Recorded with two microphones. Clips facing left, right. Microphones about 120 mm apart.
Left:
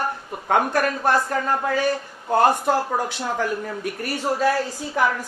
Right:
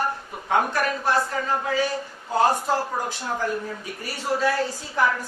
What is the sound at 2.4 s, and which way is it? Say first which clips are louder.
Speech: left 2 dB; 70° left (ahead or behind).